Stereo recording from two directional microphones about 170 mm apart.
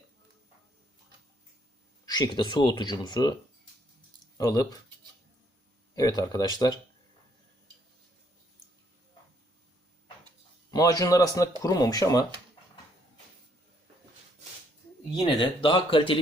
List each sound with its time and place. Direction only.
2.0 s speech: 25° left (ahead or behind)
4.4 s speech: 20° left (ahead or behind)
5.9 s speech: 20° left (ahead or behind)
10.7 s speech: 20° left (ahead or behind)
15.1 s speech: 30° left (ahead or behind)